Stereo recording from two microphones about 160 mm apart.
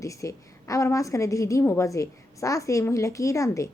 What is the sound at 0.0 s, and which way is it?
A woman's voice, 20° left (ahead or behind).